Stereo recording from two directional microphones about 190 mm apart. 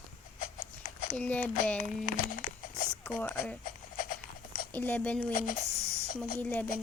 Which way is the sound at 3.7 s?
50° left (ahead or behind).